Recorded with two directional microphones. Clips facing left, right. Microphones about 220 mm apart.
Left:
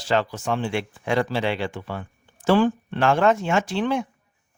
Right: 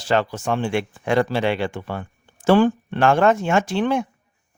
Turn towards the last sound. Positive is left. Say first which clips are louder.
# right 3 dB
turn(degrees=-50)  # may be behind; listen again after turning